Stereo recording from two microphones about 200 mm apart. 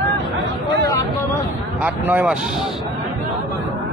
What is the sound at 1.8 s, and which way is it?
Speech, 10° right (ahead or behind).